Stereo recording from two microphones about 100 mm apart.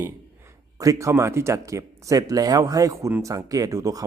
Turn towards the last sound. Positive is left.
turn(degrees=-35)  # may be behind; listen again after turning